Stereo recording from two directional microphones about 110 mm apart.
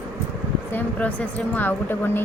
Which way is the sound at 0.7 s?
15° left (ahead or behind).